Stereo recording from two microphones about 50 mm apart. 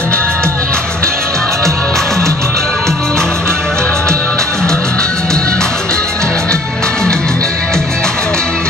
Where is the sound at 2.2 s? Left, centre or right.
Right.